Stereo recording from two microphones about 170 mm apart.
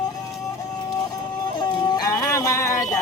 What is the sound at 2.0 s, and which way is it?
Music, 20° left (ahead or behind).